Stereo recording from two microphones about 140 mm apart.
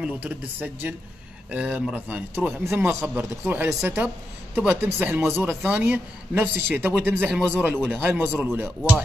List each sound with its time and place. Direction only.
0.0 s a man's voice: 10° right (ahead or behind)